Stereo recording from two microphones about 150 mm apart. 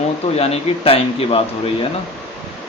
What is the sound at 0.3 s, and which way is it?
Speech, 40° left (ahead or behind).